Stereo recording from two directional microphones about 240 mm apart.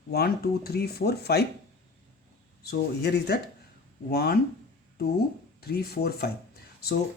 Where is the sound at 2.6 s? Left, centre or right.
Left.